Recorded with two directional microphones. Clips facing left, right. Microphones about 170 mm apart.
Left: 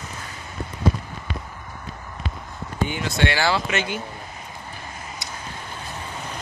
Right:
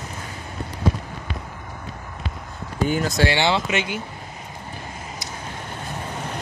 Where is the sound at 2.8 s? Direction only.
40° right (ahead or behind).